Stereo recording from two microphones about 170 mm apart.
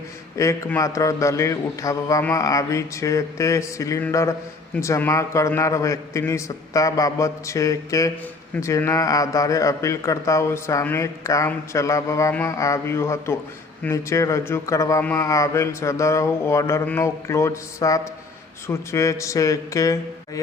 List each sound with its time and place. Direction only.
0.3 s a man's voice: 20° left (ahead or behind)